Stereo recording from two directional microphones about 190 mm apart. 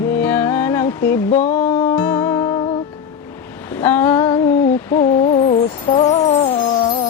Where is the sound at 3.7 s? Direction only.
10° left (ahead or behind).